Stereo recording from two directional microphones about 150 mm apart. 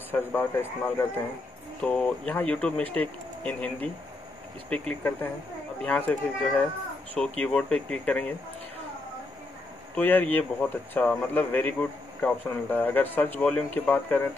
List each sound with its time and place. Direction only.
0.1 s speech: 15° left (ahead or behind)
9.9 s speech: 10° left (ahead or behind)